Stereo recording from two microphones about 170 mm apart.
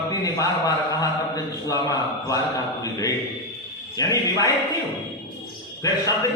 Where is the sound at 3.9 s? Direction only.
20° left (ahead or behind).